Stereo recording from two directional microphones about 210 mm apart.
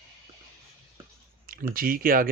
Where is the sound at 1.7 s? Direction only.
40° right (ahead or behind).